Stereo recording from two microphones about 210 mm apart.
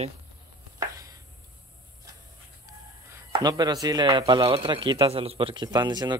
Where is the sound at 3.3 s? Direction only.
20° right (ahead or behind).